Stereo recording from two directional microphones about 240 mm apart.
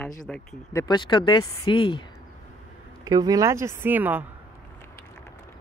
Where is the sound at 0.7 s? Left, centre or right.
Centre.